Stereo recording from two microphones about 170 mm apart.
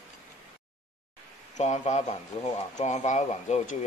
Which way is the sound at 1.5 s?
45° left (ahead or behind).